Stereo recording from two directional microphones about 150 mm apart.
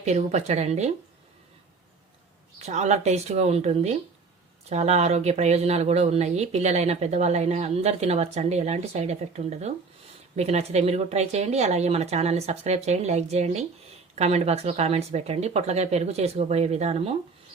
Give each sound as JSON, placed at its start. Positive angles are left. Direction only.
{"t": 0.0, "sound": "speech", "side_deg": -50}
{"t": 2.6, "sound": "speech", "side_deg": -50}